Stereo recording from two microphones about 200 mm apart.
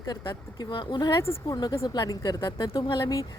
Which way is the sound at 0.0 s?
20° left (ahead or behind).